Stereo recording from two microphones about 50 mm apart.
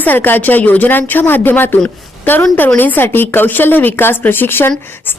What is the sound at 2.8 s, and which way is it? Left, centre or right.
A woman's voice, left.